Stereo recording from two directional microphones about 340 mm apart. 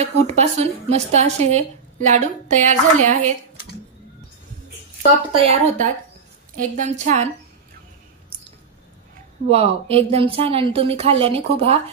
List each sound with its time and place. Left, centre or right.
0.0 s speech: centre
5.3 s speech: centre
9.5 s speech: centre